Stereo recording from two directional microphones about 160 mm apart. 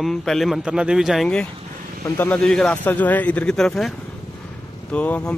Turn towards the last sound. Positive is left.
turn(degrees=10)  # may be behind; listen again after turning